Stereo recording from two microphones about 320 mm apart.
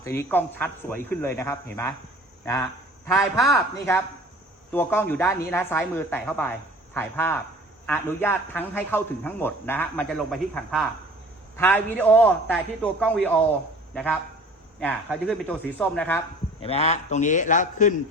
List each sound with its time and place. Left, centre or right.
0.0 s a man's voice: centre
16.6 s a man's voice: centre